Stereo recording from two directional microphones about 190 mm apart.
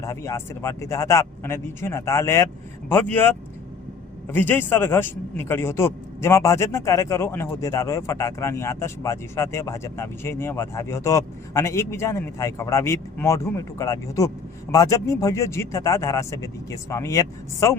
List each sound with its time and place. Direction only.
0.0 s speech: 15° left (ahead or behind)